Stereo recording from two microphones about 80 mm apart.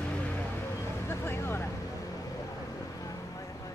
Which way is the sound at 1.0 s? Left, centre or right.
Left.